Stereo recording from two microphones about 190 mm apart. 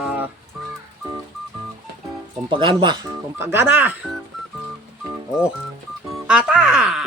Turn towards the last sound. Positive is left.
turn(degrees=-5)  # may be behind; listen again after turning